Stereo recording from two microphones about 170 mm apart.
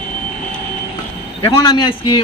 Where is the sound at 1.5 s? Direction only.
30° left (ahead or behind).